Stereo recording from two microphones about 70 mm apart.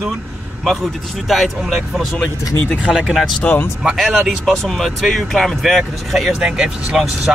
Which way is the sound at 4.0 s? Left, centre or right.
Centre.